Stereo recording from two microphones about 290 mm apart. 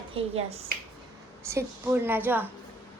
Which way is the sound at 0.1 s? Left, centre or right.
Centre.